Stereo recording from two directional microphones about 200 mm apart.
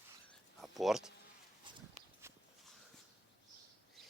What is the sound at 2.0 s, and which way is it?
Horse, 35° right (ahead or behind).